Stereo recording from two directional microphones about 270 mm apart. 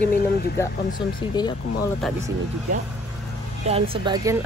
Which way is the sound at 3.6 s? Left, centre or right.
Right.